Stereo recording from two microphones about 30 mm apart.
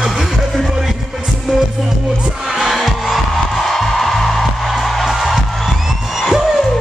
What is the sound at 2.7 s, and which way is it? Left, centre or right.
Music, centre.